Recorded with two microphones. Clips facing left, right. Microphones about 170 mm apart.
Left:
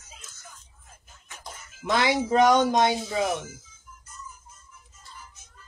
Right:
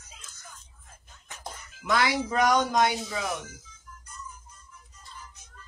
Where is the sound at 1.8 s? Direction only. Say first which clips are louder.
Left 2 dB; 25° left (ahead or behind).